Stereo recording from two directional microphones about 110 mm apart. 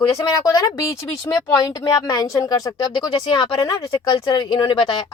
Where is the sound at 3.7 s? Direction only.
30° left (ahead or behind).